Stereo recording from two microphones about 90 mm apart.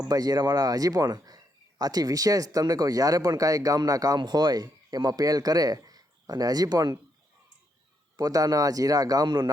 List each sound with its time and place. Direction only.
0.1 s speech: 45° right (ahead or behind)
8.1 s speech: 45° right (ahead or behind)